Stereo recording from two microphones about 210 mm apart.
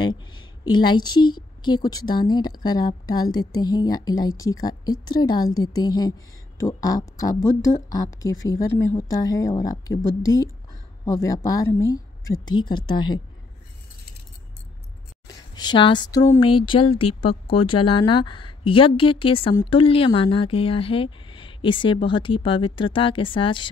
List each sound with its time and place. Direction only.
0.0 s a woman's voice: 20° left (ahead or behind)
15.2 s a woman's voice: 20° left (ahead or behind)